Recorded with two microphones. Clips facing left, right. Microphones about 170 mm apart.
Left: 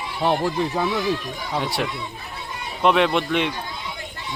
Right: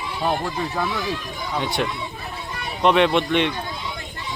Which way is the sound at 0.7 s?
20° left (ahead or behind).